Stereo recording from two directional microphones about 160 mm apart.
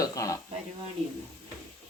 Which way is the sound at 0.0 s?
20° left (ahead or behind).